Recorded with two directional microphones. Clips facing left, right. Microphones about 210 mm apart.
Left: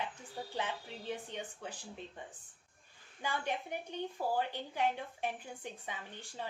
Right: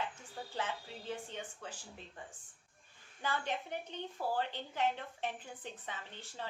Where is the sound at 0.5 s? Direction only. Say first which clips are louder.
Even; 15° left (ahead or behind).